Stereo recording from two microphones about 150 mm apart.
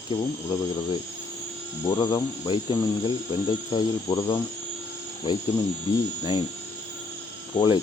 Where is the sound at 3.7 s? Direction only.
20° left (ahead or behind).